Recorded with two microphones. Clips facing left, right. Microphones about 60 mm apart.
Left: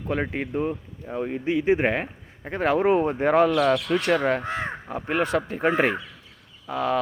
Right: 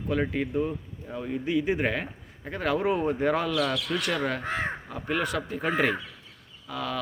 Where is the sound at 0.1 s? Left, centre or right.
Left.